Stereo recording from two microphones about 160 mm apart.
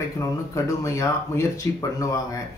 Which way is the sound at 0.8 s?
15° left (ahead or behind).